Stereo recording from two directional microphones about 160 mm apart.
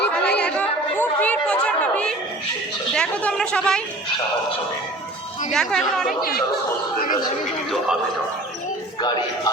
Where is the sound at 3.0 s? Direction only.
5° left (ahead or behind).